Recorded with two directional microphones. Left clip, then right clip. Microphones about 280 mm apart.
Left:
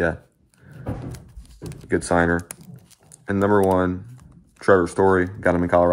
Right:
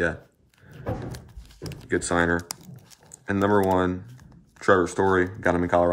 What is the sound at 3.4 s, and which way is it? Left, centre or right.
Speech, left.